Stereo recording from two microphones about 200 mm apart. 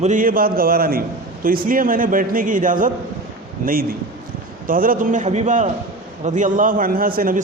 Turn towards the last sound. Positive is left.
turn(degrees=-45)  # may be behind; listen again after turning